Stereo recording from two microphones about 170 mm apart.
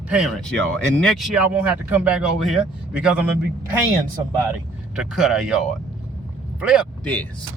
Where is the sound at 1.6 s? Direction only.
10° right (ahead or behind).